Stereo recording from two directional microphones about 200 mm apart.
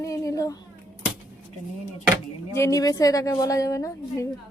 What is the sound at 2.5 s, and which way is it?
A woman's voice, 15° left (ahead or behind).